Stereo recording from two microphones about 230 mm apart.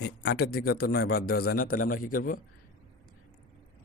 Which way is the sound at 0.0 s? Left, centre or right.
Left.